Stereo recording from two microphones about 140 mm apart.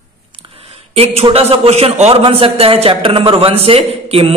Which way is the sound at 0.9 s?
45° right (ahead or behind).